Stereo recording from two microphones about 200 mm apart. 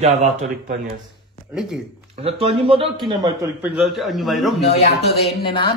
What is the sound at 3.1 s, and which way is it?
Speech, 20° right (ahead or behind).